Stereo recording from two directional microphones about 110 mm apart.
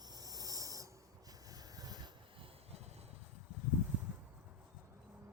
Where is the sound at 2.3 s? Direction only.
65° right (ahead or behind).